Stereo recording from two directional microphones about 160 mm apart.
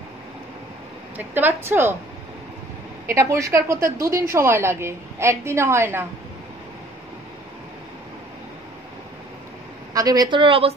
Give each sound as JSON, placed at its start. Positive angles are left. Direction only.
{"t": 1.1, "sound": "a woman's voice", "side_deg": -10}
{"t": 3.1, "sound": "a woman's voice", "side_deg": -20}
{"t": 9.9, "sound": "a woman's voice", "side_deg": -25}